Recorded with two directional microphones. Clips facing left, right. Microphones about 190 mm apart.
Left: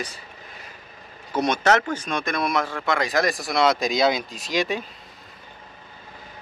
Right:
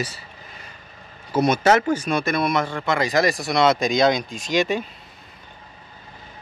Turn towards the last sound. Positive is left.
turn(degrees=0)  # may be behind; listen again after turning